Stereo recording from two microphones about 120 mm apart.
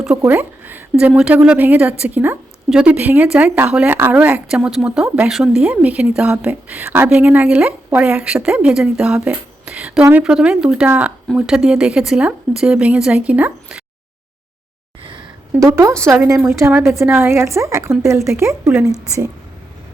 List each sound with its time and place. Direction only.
0.2 s a woman's voice: 15° right (ahead or behind)
10.0 s speech: 20° right (ahead or behind)
10.2 s a woman's voice: 5° right (ahead or behind)
15.6 s speech: 20° right (ahead or behind)